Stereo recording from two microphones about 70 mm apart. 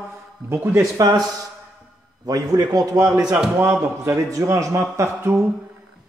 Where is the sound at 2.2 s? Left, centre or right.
Right.